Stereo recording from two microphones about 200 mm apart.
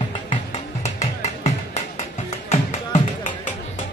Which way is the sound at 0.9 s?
35° left (ahead or behind).